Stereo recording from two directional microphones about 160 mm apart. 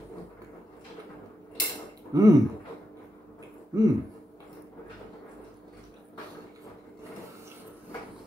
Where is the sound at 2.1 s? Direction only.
20° right (ahead or behind).